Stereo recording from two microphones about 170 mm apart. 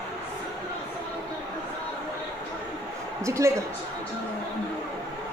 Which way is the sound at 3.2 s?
15° right (ahead or behind).